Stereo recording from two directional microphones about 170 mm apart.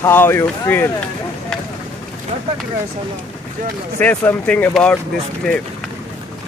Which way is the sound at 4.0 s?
10° left (ahead or behind).